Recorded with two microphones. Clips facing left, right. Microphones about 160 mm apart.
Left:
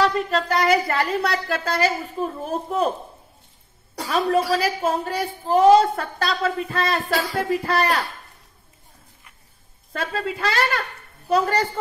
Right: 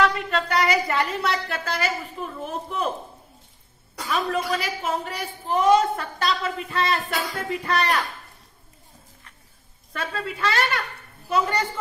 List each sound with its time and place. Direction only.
0.0 s a woman's voice: 40° left (ahead or behind)
3.9 s a woman's voice: 35° left (ahead or behind)
9.9 s a woman's voice: 35° left (ahead or behind)